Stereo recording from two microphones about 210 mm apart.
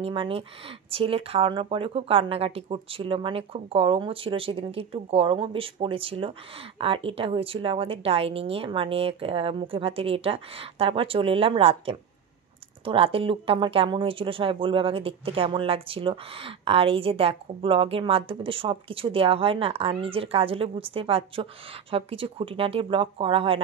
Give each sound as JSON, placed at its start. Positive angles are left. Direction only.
{"t": 0.0, "sound": "speech", "side_deg": -25}